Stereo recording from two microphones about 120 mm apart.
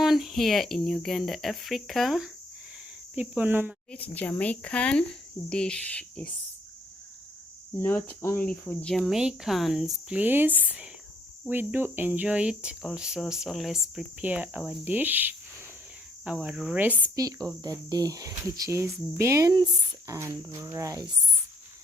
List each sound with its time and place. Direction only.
0.0 s speech: centre (ahead or behind)
3.2 s cricket: 15° right (ahead or behind)
3.9 s speech: 10° left (ahead or behind)
7.8 s cricket: 20° left (ahead or behind)
8.6 s speech: 10° left (ahead or behind); by 10.2 s 5° right (ahead or behind)
10.2 s cricket: 15° right (ahead or behind)
14.3 s cricket: 15° right (ahead or behind)
17.2 s speech: 30° right (ahead or behind)
19.5 s speech: 35° right (ahead or behind)
20.1 s speech: 25° right (ahead or behind)